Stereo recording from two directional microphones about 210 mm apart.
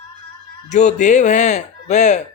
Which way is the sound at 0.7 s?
35° left (ahead or behind).